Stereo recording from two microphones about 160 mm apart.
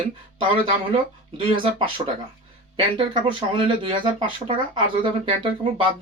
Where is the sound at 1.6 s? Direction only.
30° right (ahead or behind).